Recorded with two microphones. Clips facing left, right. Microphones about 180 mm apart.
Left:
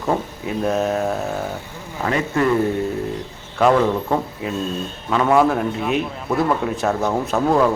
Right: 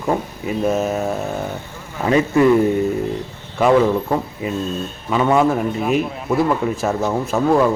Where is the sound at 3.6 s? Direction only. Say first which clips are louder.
Right 2 dB; 5° right (ahead or behind).